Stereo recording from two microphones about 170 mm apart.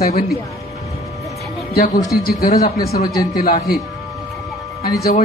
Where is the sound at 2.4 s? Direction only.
50° left (ahead or behind).